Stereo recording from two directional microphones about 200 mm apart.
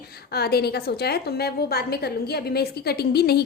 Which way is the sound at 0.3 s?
50° left (ahead or behind).